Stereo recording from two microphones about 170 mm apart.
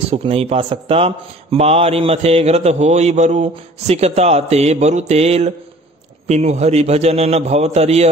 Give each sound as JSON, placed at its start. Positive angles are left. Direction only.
{"t": 0.1, "sound": "a man's voice", "side_deg": -35}